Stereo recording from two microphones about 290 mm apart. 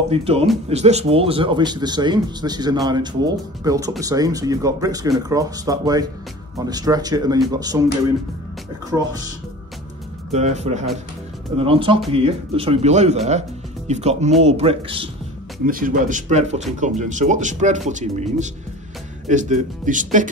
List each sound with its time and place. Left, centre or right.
0.1 s speech: right
8.9 s speech: centre
10.3 s speech: right